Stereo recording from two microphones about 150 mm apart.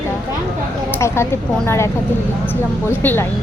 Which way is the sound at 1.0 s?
20° left (ahead or behind).